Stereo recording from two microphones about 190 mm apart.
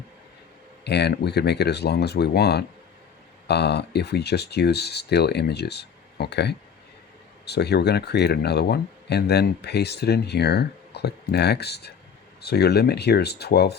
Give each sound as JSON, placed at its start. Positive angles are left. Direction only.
{"t": 0.9, "sound": "speech", "side_deg": 60}